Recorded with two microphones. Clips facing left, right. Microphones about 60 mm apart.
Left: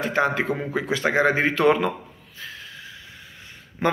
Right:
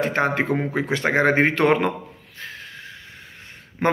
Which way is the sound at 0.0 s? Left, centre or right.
Right.